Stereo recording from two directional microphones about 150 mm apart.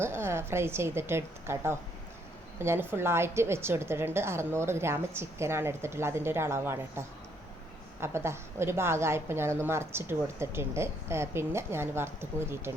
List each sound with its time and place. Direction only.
0.0 s a woman's voice: 15° right (ahead or behind)
8.0 s a woman's voice: 15° right (ahead or behind)